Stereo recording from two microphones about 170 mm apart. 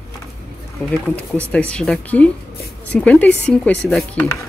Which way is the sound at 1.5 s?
5° left (ahead or behind).